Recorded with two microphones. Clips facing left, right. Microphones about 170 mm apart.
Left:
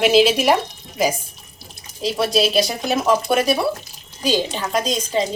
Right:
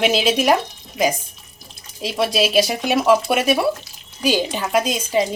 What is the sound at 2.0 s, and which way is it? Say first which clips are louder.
A woman's voice: left 1 dB; 5° right (ahead or behind).